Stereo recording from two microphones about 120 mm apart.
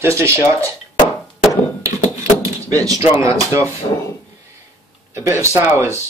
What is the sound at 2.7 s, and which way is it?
Speech, 30° right (ahead or behind).